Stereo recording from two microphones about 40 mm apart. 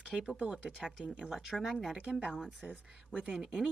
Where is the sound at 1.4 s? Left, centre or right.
Centre.